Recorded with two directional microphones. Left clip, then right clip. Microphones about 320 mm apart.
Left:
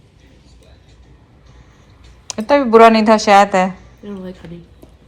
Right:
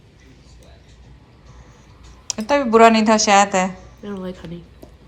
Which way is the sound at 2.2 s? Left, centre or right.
Centre.